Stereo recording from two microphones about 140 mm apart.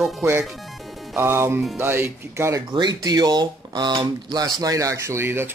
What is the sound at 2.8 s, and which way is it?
Speech, 30° right (ahead or behind).